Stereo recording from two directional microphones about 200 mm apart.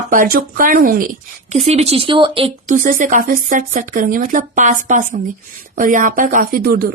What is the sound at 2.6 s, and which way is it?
A woman's voice, 40° right (ahead or behind).